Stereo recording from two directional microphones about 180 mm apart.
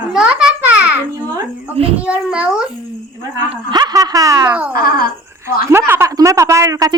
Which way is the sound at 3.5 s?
25° right (ahead or behind).